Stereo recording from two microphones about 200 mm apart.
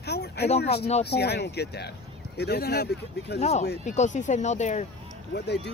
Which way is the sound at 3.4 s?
35° left (ahead or behind).